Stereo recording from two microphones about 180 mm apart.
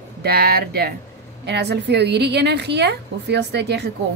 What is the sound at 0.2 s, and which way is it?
Speech, 60° right (ahead or behind).